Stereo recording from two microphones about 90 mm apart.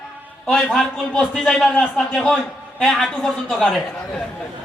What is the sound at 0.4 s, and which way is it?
A man's voice, 10° left (ahead or behind).